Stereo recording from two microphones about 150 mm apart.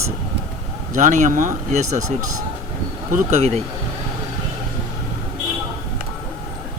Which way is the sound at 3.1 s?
45° right (ahead or behind).